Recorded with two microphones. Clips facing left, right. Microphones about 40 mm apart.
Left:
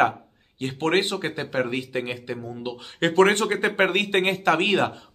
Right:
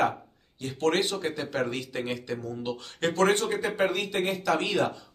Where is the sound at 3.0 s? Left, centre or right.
Left.